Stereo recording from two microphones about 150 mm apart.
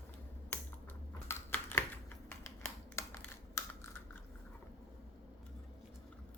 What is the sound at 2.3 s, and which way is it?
Computer keyboard, 15° left (ahead or behind).